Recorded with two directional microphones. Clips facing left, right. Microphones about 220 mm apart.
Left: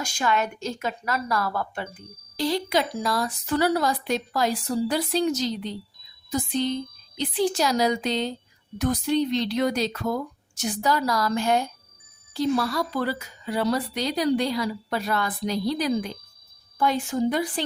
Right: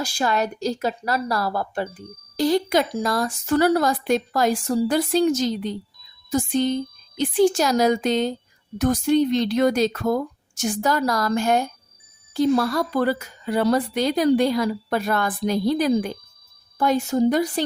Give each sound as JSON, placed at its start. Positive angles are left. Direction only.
{"t": 0.0, "sound": "speech", "side_deg": -35}